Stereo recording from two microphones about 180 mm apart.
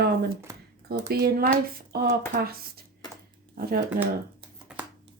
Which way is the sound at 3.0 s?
25° left (ahead or behind).